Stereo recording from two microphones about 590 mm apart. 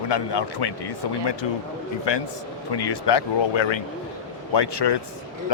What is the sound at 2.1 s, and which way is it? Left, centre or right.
A man's voice, left.